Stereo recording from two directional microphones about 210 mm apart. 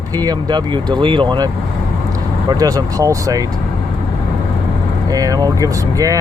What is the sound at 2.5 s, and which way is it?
Speech, 15° right (ahead or behind).